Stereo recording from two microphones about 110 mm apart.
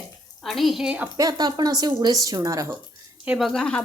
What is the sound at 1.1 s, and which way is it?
Speech, 35° right (ahead or behind).